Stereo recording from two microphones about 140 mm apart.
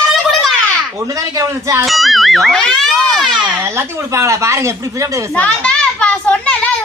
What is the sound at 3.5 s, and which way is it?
Speech, 20° right (ahead or behind).